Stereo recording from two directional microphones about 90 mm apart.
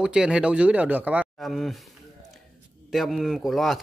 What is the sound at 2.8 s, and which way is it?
Speech, centre (ahead or behind).